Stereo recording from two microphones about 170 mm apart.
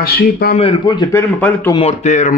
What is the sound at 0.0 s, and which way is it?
Speech, 65° left (ahead or behind).